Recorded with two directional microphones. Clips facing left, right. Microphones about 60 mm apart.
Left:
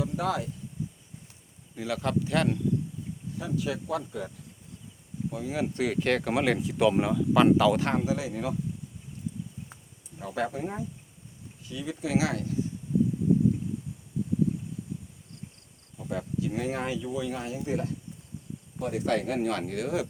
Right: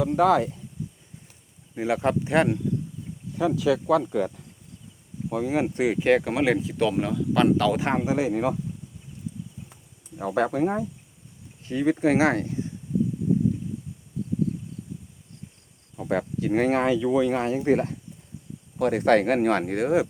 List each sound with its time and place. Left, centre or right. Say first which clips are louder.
0.0 s speech: right 9 dB; right
1.7 s speech: right 5 dB; right
3.3 s speech: right 9 dB; right
5.5 s speech: right 6 dB; right
5.7 s speech: right 6 dB; centre
7.8 s speech: right 3 dB; right
8.0 s speech: right 6 dB; right
10.2 s speech: right 8 dB; right
16.0 s speech: right 6 dB; right
18.8 s speech: right 8 dB; right